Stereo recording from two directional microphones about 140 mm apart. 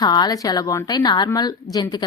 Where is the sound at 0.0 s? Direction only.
30° left (ahead or behind).